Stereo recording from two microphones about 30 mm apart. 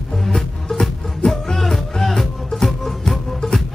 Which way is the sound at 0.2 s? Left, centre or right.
Centre.